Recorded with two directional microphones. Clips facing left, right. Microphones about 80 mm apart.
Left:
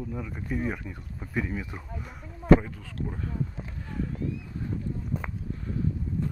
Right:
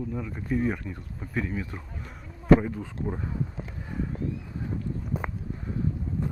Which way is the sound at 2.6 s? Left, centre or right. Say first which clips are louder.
Right 5 dB; centre.